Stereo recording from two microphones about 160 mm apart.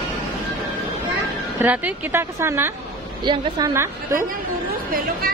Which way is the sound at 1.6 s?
10° right (ahead or behind).